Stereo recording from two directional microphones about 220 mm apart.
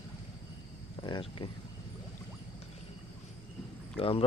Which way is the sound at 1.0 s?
25° left (ahead or behind).